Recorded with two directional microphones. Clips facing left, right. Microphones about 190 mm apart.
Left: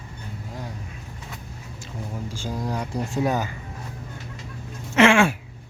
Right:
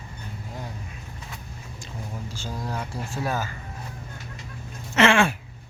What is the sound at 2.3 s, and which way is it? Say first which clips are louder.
Speech: left 4 dB; 15° left (ahead or behind).